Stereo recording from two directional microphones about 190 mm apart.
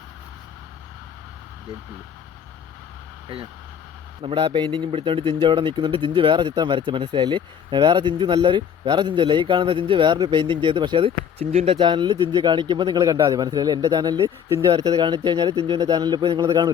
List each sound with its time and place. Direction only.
4.2 s speech: 25° right (ahead or behind)